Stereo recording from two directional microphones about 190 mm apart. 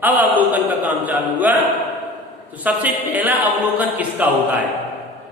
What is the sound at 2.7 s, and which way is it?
Speech, 10° right (ahead or behind).